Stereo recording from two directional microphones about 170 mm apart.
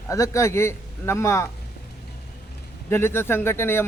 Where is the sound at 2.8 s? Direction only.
15° left (ahead or behind).